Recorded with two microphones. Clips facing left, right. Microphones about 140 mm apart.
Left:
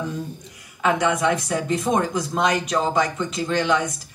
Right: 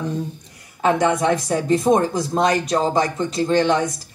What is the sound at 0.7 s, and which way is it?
Speech, 40° right (ahead or behind).